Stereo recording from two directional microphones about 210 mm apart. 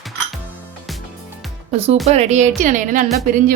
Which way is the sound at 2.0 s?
30° right (ahead or behind).